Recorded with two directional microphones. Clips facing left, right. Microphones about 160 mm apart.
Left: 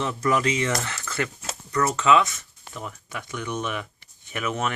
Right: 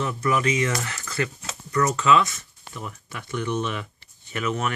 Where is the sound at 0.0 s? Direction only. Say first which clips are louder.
Even; 30° left (ahead or behind).